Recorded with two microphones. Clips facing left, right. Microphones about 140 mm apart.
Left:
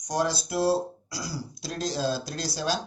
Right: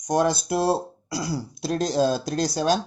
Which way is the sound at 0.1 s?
55° right (ahead or behind).